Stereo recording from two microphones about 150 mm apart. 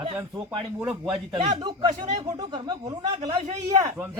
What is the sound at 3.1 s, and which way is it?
Speech, 45° right (ahead or behind).